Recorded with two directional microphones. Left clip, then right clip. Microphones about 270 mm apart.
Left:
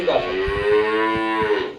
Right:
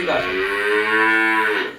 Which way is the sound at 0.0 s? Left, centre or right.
Right.